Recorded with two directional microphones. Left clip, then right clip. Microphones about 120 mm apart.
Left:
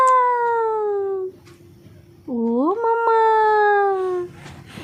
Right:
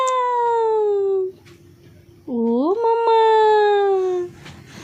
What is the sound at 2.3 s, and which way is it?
Cat, 25° right (ahead or behind).